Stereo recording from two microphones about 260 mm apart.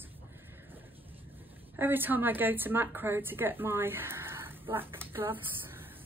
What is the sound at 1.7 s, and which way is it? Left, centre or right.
A woman's voice, centre.